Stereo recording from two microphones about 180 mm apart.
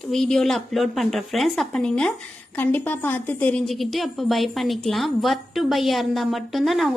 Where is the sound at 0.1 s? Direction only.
5° left (ahead or behind).